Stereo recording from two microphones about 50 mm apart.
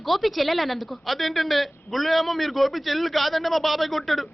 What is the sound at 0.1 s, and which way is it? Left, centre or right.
A woman's voice, centre.